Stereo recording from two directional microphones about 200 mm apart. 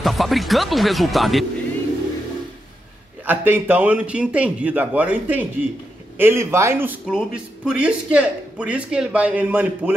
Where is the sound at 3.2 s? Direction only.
10° right (ahead or behind).